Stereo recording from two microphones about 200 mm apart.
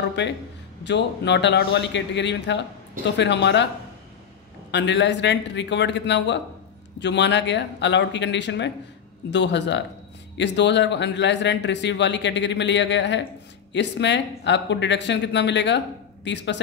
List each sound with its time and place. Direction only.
0.2 s speech: 60° left (ahead or behind)
4.6 s speech: 60° left (ahead or behind)